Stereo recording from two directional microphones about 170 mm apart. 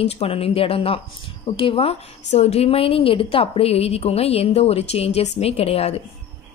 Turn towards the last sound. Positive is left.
turn(degrees=35)  # may be behind; listen again after turning